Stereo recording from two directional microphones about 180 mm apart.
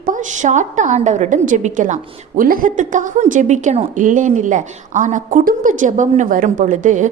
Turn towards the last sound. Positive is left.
turn(degrees=-45)  # may be behind; listen again after turning